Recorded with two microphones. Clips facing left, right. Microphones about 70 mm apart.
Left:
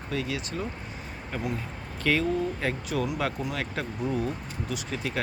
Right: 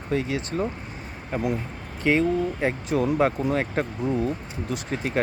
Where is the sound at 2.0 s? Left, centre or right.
Right.